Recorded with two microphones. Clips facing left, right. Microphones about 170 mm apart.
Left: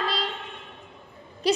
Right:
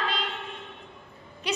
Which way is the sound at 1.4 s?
35° left (ahead or behind).